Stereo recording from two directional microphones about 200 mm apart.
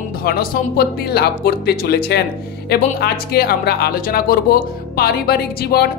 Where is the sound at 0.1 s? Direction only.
50° left (ahead or behind).